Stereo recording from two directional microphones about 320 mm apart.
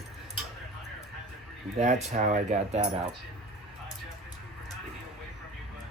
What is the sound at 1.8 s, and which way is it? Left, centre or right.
Speech, right.